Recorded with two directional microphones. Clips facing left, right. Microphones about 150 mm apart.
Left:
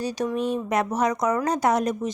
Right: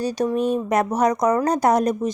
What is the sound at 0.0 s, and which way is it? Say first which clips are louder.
Speech: right 4 dB; 40° right (ahead or behind).